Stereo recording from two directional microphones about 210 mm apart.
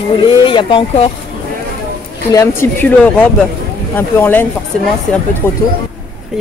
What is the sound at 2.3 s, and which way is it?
Speech, 10° left (ahead or behind).